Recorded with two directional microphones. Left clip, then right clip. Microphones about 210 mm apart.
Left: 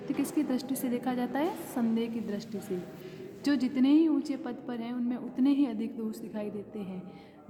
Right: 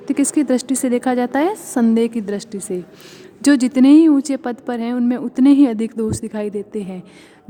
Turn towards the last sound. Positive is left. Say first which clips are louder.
# right 15 dB
turn(degrees=-45)  # may be behind; listen again after turning